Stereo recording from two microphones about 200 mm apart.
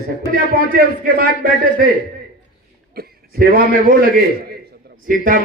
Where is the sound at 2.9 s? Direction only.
50° right (ahead or behind).